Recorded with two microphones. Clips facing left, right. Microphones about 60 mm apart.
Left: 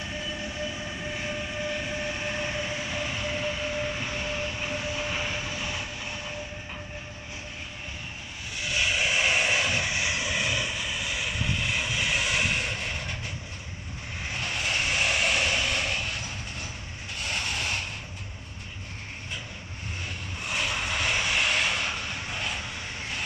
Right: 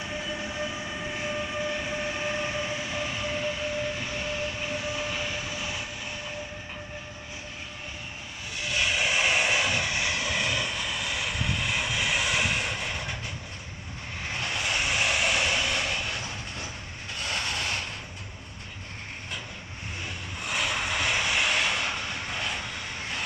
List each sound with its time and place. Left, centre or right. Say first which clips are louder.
0.4 s train: right 1 dB; centre
1.1 s train: right 3 dB; centre
5.1 s vehicle: left 1 dB; centre
5.4 s vehicle: left 1 dB; centre
8.6 s vehicle: even; centre
9.8 s vehicle: even; centre
14.6 s vehicle: even; centre
15.9 s vehicle: even; right
17.2 s a sound: even; right
20.4 s vehicle: right 1 dB; centre